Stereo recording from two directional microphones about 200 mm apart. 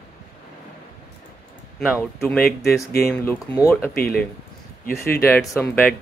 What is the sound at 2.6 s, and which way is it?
Speech, 50° left (ahead or behind).